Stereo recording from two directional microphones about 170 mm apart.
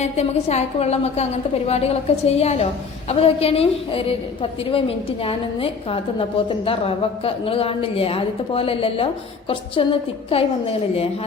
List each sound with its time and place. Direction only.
0.0 s a woman's voice: 40° left (ahead or behind)